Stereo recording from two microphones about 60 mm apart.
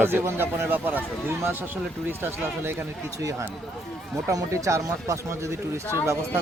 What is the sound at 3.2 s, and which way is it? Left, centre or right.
Speech, right.